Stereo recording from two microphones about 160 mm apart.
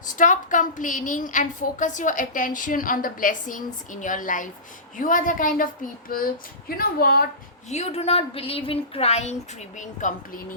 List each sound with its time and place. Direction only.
0.2 s a woman's voice: 55° left (ahead or behind)
7.7 s speech: 40° left (ahead or behind)